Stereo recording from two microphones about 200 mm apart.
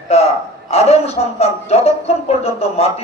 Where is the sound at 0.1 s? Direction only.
30° left (ahead or behind).